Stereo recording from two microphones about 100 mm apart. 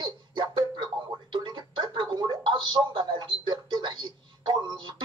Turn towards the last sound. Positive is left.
turn(degrees=-50)  # may be behind; listen again after turning